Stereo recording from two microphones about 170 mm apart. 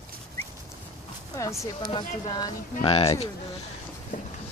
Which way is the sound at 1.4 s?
20° left (ahead or behind).